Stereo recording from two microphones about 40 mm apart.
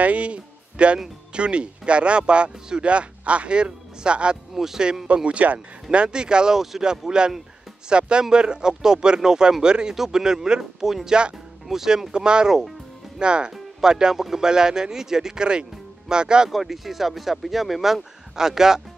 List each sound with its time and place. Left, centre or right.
0.0 s speech: right
4.6 s speech: centre
5.0 s speech: right
5.9 s speech: right
11.1 s speech: right
11.6 s speech: centre
13.5 s speech: centre
14.1 s speech: centre
14.4 s speech: centre
16.4 s speech: centre
18.3 s speech: centre